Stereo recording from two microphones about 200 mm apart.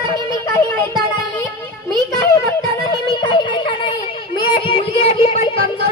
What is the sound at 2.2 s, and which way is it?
Music, 15° left (ahead or behind).